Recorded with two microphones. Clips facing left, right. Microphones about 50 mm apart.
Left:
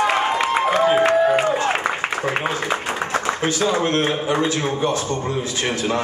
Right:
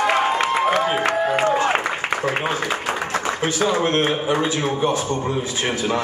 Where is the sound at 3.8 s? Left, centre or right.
Right.